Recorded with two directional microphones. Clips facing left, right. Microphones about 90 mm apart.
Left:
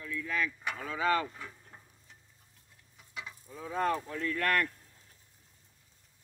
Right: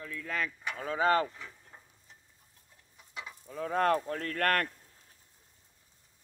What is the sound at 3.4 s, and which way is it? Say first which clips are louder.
Speech: right 4 dB; 60° right (ahead or behind).